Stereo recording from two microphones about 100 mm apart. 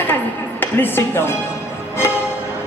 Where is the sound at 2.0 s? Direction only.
25° left (ahead or behind).